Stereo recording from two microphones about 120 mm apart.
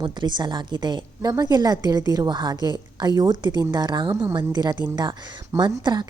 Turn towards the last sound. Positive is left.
turn(degrees=-40)  # may be behind; listen again after turning